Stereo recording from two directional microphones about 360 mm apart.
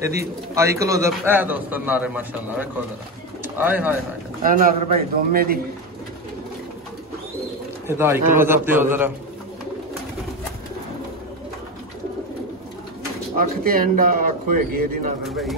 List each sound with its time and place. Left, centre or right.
0.0 s speech: centre
4.4 s a man's voice: right
7.8 s speech: centre
13.4 s a man's voice: right
15.2 s speech: centre